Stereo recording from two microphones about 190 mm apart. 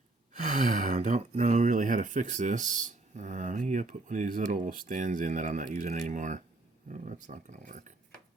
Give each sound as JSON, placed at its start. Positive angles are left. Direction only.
{"t": 0.3, "sound": "speech", "side_deg": -40}